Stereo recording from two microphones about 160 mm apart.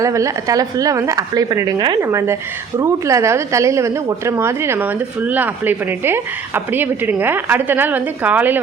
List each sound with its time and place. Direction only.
0.0 s a woman's voice: 20° right (ahead or behind)